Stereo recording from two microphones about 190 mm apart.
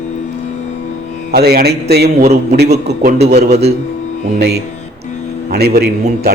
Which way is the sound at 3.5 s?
35° right (ahead or behind).